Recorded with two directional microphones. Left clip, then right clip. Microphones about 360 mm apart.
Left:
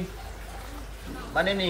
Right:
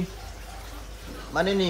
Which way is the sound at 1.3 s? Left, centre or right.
Centre.